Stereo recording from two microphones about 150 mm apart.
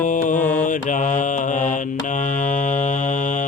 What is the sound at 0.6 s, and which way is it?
Mantra, 60° left (ahead or behind).